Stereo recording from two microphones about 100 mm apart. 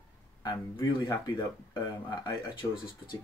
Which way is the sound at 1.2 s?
40° left (ahead or behind).